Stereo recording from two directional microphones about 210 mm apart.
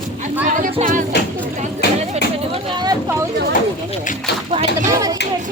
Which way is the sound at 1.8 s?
50° left (ahead or behind).